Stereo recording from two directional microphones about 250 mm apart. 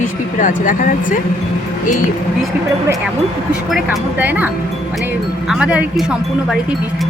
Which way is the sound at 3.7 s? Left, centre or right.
Centre.